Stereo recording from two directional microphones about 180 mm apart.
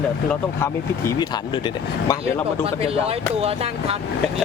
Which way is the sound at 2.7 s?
30° right (ahead or behind).